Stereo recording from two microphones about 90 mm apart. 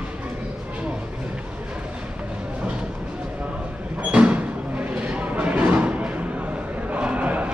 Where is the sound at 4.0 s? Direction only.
15° right (ahead or behind).